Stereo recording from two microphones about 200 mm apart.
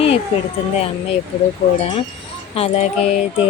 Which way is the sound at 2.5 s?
30° left (ahead or behind).